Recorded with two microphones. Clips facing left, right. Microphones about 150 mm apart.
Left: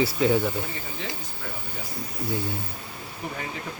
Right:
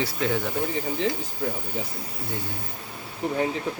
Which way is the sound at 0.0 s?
5° left (ahead or behind).